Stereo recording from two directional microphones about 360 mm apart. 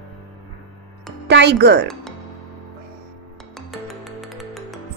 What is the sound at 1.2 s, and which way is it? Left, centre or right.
Speech, right.